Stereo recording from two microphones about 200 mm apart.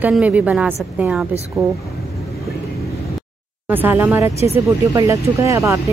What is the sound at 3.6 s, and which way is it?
Speech, 10° right (ahead or behind).